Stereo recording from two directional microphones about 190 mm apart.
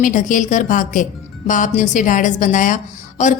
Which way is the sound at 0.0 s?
40° left (ahead or behind).